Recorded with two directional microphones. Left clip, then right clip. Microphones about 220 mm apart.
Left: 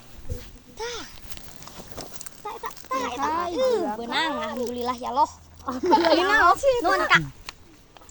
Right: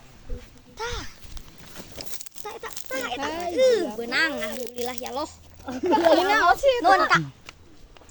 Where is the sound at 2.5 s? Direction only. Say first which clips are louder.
Left 3 dB; 30° right (ahead or behind).